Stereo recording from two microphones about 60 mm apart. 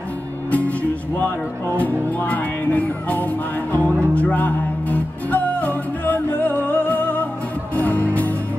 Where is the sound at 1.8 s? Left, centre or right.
Left.